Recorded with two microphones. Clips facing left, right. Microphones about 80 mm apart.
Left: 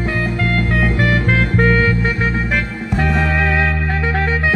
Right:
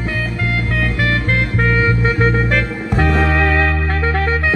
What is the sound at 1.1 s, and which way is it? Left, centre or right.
Music, centre.